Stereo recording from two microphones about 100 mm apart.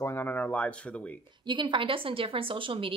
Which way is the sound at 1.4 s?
55° right (ahead or behind).